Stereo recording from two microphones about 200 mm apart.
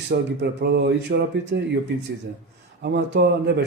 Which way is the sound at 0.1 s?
55° right (ahead or behind).